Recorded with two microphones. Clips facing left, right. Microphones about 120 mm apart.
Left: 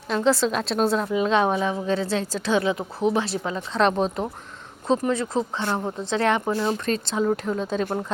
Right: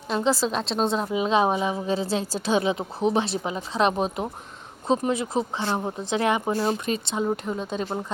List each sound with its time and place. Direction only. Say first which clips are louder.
0.1 s speech: left 2 dB; centre (ahead or behind)
0.9 s a woman's voice: right 1 dB; 20° right (ahead or behind)
3.8 s speech: left 2 dB; 5° right (ahead or behind)
4.9 s speech: left 1 dB; 15° right (ahead or behind)